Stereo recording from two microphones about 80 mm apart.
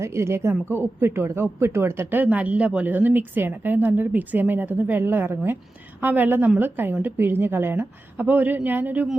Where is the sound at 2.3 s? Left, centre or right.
Centre.